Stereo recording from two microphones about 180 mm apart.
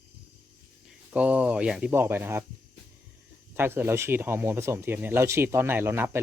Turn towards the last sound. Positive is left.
turn(degrees=-15)  # may be behind; listen again after turning